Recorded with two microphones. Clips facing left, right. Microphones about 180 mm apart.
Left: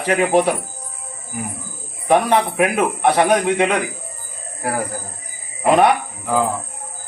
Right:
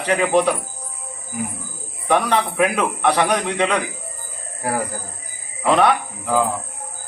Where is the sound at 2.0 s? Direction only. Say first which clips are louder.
Left 3 dB; 20° left (ahead or behind).